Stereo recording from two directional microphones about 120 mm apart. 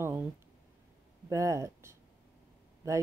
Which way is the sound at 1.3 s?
25° right (ahead or behind).